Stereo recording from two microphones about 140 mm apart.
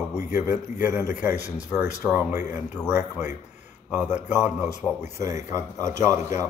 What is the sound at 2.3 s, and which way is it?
Speech, 15° right (ahead or behind).